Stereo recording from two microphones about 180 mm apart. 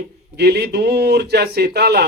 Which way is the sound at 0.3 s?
65° right (ahead or behind).